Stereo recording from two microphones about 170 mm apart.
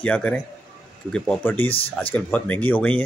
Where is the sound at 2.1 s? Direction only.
10° left (ahead or behind).